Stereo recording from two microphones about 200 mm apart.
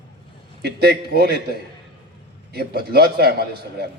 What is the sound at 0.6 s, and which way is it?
Speech, 55° right (ahead or behind).